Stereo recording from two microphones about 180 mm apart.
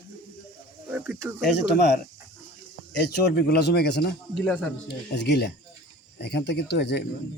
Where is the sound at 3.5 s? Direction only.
65° left (ahead or behind).